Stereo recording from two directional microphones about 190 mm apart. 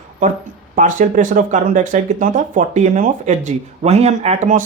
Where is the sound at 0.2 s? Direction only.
40° right (ahead or behind).